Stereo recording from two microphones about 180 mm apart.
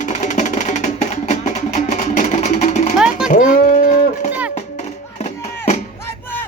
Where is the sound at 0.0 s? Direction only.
40° left (ahead or behind).